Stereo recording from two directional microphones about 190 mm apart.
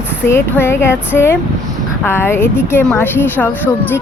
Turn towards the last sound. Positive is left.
turn(degrees=10)  # may be behind; listen again after turning